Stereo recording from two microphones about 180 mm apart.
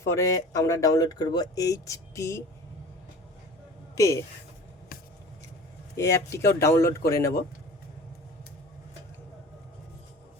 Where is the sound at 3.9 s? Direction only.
20° left (ahead or behind).